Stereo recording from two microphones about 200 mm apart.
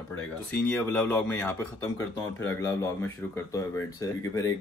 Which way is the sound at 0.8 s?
10° left (ahead or behind).